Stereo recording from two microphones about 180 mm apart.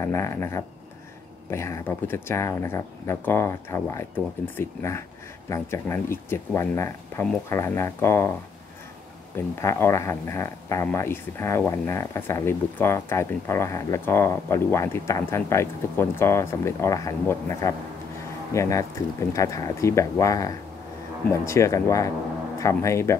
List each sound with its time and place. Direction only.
0.0 s speech: 15° left (ahead or behind)
9.6 s speech: 15° left (ahead or behind)